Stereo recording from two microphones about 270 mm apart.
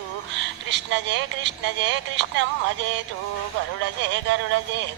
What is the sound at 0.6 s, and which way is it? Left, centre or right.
Music, right.